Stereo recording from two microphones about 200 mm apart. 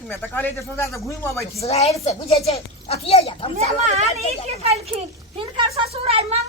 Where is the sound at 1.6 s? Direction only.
30° left (ahead or behind).